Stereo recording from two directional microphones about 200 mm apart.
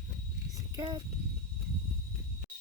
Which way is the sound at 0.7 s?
20° right (ahead or behind).